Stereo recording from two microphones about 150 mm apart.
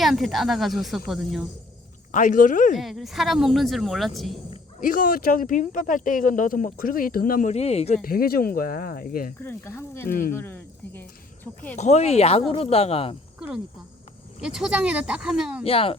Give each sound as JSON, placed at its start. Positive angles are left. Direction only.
{"t": 0.0, "sound": "speech", "side_deg": 0}
{"t": 2.1, "sound": "speech", "side_deg": 60}
{"t": 2.7, "sound": "speech", "side_deg": 0}
{"t": 4.8, "sound": "speech", "side_deg": 65}
{"t": 7.4, "sound": "speech", "side_deg": 45}
{"t": 8.0, "sound": "speech", "side_deg": 80}
{"t": 9.4, "sound": "speech", "side_deg": 15}
{"t": 11.8, "sound": "speech", "side_deg": 45}
{"t": 14.4, "sound": "speech", "side_deg": -5}
{"t": 15.6, "sound": "speech", "side_deg": 40}